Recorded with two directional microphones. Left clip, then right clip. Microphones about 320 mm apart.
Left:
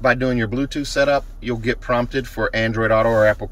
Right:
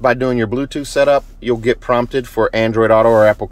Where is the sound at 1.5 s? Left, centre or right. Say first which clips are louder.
Right 6 dB; centre.